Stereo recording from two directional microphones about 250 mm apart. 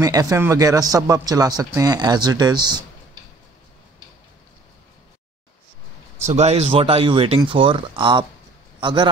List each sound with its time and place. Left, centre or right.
0.0 s a man's voice: centre
6.2 s speech: right